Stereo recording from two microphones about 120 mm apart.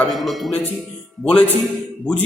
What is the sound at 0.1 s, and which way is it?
A man's voice, centre (ahead or behind).